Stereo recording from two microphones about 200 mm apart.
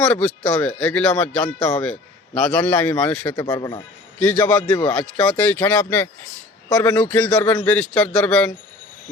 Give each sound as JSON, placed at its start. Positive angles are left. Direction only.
{"t": 0.0, "sound": "speech", "side_deg": 5}
{"t": 3.4, "sound": "speech", "side_deg": 20}
{"t": 4.2, "sound": "speech", "side_deg": 5}